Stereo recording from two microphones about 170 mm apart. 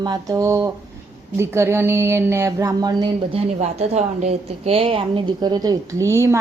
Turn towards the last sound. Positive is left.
turn(degrees=-15)  # may be behind; listen again after turning